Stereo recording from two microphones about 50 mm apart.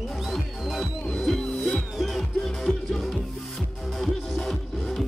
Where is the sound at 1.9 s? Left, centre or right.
Centre.